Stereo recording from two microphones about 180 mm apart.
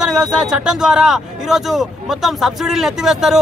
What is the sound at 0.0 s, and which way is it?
A man's voice, 5° right (ahead or behind).